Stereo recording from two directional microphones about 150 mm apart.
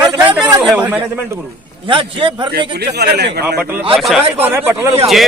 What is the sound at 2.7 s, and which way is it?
Speech, 90° right.